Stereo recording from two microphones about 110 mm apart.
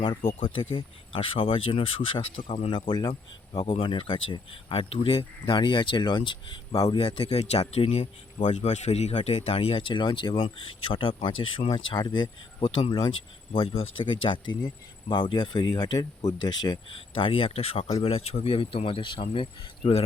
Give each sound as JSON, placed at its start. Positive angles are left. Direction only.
{"t": 0.0, "sound": "speech", "side_deg": 45}
{"t": 3.7, "sound": "speech", "side_deg": 55}
{"t": 7.0, "sound": "speech", "side_deg": 50}
{"t": 7.3, "sound": "speech", "side_deg": 70}
{"t": 8.4, "sound": "speech", "side_deg": 90}